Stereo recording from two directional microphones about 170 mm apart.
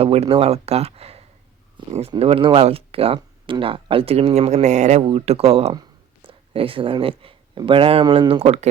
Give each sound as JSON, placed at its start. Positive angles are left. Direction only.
{"t": 0.0, "sound": "speech", "side_deg": -35}